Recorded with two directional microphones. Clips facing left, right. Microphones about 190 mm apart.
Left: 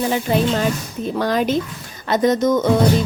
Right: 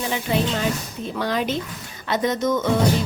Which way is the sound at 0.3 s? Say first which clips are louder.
Left 2 dB; 45° left (ahead or behind).